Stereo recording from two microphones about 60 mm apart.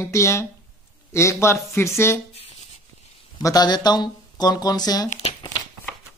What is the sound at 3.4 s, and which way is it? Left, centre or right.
Speech, left.